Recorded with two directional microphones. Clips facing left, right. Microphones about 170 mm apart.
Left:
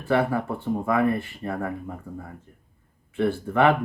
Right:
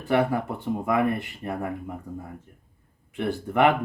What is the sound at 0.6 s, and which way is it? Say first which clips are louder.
Speech: left 1 dB; 20° right (ahead or behind).